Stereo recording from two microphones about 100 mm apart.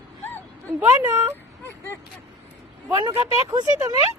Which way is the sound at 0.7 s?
15° right (ahead or behind).